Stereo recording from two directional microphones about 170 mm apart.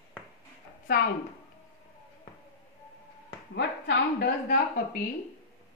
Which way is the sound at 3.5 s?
85° left.